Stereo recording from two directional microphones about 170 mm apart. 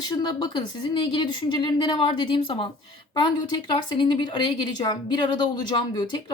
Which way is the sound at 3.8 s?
25° left (ahead or behind).